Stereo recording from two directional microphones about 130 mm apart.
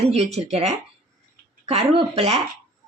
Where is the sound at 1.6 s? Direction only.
50° right (ahead or behind).